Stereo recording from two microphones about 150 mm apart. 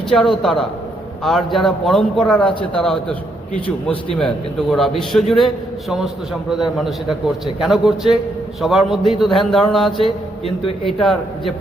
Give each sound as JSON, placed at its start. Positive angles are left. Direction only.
{"t": 0.1, "sound": "a man's voice", "side_deg": 0}
{"t": 6.5, "sound": "a man's voice", "side_deg": 0}
{"t": 10.4, "sound": "a man's voice", "side_deg": 40}
{"t": 10.8, "sound": "a man's voice", "side_deg": 0}